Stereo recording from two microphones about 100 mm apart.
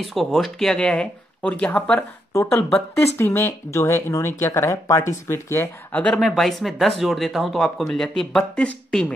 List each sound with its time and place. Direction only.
0.1 s speech: centre (ahead or behind)
3.2 s speech: 25° left (ahead or behind)
6.1 s speech: centre (ahead or behind)